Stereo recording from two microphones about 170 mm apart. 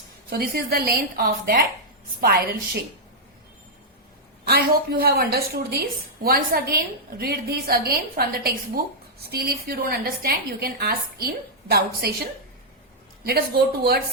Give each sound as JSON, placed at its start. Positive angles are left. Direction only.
{"t": 0.3, "sound": "a woman's voice", "side_deg": -65}
{"t": 4.4, "sound": "a woman's voice", "side_deg": -65}
{"t": 13.2, "sound": "speech", "side_deg": -70}